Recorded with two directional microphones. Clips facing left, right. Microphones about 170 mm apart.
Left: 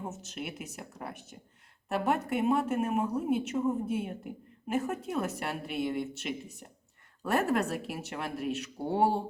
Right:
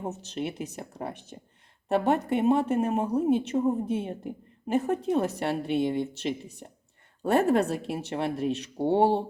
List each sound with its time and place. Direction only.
0.1 s a woman's voice: 30° right (ahead or behind)